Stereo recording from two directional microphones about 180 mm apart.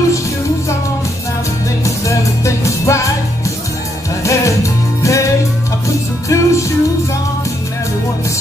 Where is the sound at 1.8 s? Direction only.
15° left (ahead or behind).